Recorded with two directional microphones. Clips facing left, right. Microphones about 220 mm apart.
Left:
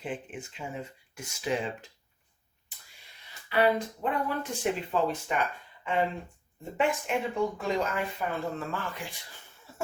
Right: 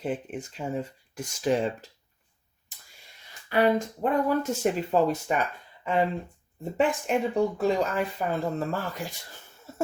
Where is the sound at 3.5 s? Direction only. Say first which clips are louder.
Right 3 dB; 45° right (ahead or behind).